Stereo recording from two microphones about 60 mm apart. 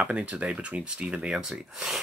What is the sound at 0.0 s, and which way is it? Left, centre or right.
Speech, right.